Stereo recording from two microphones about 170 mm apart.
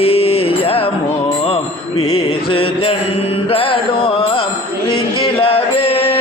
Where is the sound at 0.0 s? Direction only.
35° left (ahead or behind).